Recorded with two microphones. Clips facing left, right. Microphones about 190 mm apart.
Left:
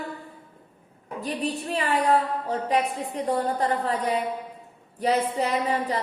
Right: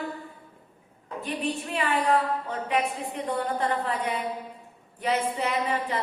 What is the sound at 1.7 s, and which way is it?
A woman's voice, 35° left (ahead or behind).